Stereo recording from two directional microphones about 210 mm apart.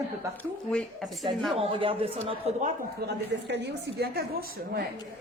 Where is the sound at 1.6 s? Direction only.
25° right (ahead or behind).